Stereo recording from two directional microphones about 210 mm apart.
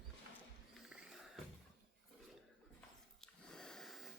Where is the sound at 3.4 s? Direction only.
5° left (ahead or behind).